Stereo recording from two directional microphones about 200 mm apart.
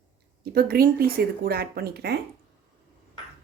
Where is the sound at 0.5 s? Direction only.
50° right (ahead or behind).